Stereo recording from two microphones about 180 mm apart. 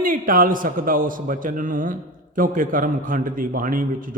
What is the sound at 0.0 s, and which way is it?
A man's voice, 50° right (ahead or behind).